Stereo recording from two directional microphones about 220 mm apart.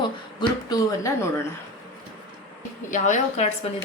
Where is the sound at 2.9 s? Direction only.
35° left (ahead or behind).